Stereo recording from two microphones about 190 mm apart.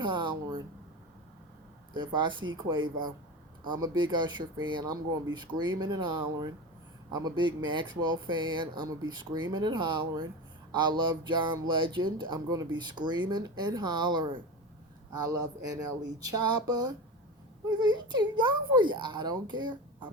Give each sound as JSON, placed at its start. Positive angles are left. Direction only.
{"t": 0.0, "sound": "a sound", "side_deg": -25}
{"t": 1.9, "sound": "speech", "side_deg": -25}
{"t": 3.6, "sound": "speech", "side_deg": -25}